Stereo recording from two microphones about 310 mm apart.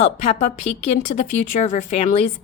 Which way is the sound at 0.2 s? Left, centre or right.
Centre.